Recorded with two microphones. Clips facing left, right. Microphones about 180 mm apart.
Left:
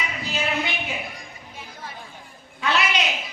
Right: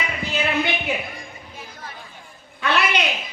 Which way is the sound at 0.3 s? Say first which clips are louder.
Right 4 dB; 60° right (ahead or behind).